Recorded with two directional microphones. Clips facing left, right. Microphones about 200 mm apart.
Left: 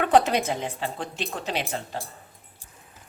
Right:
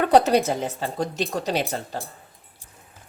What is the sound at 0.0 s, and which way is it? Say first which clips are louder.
Speech: right 3 dB; 35° right (ahead or behind).